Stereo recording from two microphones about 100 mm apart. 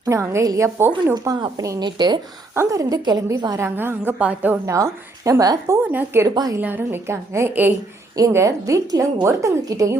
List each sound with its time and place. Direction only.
0.1 s a woman's voice: 30° right (ahead or behind)
1.8 s speech: 45° right (ahead or behind)
2.6 s a woman's voice: 35° right (ahead or behind)
3.6 s a woman's voice: 20° right (ahead or behind)
4.6 s a woman's voice: 35° right (ahead or behind)
5.9 s a woman's voice: 20° right (ahead or behind)
6.2 s a woman's voice: 40° right (ahead or behind)
6.6 s a woman's voice: 20° right (ahead or behind); by 10.0 s 35° right (ahead or behind)